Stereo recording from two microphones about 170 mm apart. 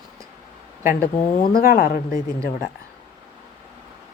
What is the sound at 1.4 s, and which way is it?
Speech, 60° left (ahead or behind).